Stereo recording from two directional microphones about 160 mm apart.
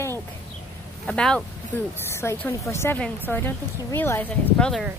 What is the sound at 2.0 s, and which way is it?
A woman's voice, 15° left (ahead or behind).